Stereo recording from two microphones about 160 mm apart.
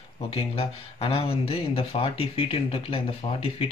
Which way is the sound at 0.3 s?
40° left (ahead or behind).